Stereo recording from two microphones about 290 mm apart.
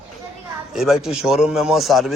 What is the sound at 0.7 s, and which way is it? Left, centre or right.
A man's voice, centre.